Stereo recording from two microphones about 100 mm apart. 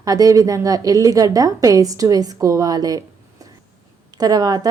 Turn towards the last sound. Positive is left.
turn(degrees=-40)  # may be behind; listen again after turning